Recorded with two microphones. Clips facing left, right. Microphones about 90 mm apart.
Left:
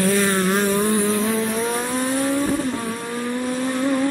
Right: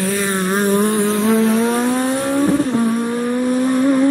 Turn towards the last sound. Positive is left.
turn(degrees=-20)  # may be behind; listen again after turning